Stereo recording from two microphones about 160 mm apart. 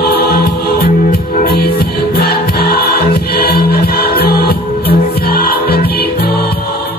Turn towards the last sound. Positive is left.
turn(degrees=75)  # may be behind; listen again after turning